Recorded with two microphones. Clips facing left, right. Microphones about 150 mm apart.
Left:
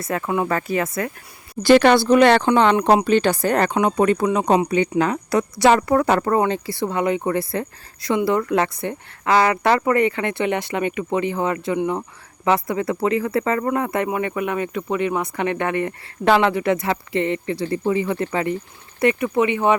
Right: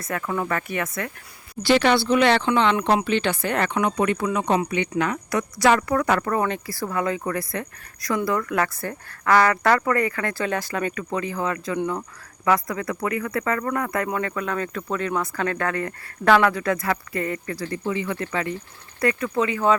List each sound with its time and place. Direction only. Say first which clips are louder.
0.0 s speech: left 4 dB; 30° left (ahead or behind)
1.6 s speech: left 6 dB; 50° left (ahead or behind); by 19.7 s 20° left (ahead or behind)